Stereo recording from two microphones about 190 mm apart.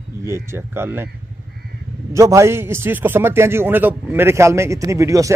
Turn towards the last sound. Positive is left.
turn(degrees=-15)  # may be behind; listen again after turning